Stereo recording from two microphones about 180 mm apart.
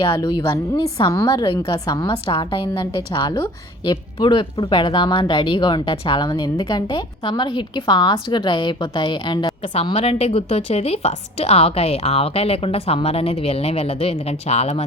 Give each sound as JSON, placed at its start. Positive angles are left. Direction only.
{"t": 0.0, "sound": "a woman's voice", "side_deg": 25}